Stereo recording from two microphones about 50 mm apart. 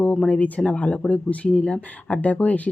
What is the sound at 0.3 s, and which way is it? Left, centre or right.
Speech, left.